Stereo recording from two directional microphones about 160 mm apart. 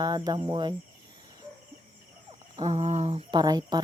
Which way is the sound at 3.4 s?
25° right (ahead or behind).